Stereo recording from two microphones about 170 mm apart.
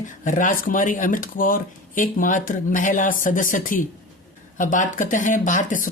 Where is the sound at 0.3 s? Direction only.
50° left (ahead or behind).